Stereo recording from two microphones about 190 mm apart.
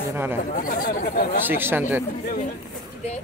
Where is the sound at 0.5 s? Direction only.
45° left (ahead or behind).